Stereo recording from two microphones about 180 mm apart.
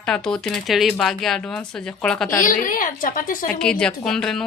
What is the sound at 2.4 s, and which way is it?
A woman's voice, 45° left (ahead or behind).